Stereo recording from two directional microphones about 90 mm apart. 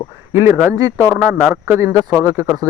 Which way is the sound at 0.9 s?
35° right (ahead or behind).